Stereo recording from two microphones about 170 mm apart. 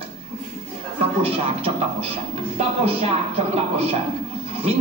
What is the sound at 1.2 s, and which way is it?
A man's voice, 35° right (ahead or behind).